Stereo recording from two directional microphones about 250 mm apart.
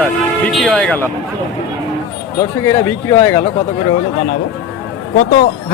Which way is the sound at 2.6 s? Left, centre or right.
Centre.